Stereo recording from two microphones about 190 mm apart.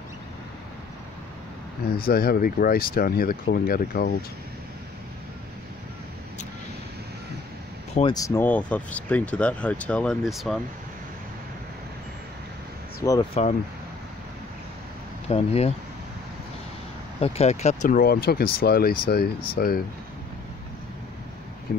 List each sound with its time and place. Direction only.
2.0 s speech: 50° left (ahead or behind)
8.1 s speech: 15° left (ahead or behind); by 10.6 s centre (ahead or behind)
13.0 s speech: 20° left (ahead or behind)
13.3 s speech: 35° left (ahead or behind)
15.2 s speech: 35° left (ahead or behind)
17.2 s speech: 35° left (ahead or behind); by 19.8 s 55° left (ahead or behind)